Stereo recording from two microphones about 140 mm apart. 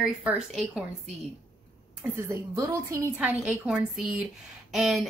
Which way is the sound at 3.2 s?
10° right (ahead or behind).